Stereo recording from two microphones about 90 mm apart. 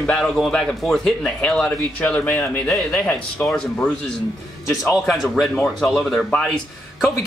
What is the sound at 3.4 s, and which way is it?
Speech, 5° left (ahead or behind).